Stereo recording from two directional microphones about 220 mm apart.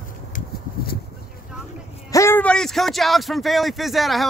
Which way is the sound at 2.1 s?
10° left (ahead or behind).